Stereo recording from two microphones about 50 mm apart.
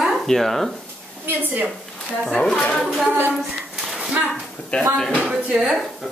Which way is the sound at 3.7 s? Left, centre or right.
Centre.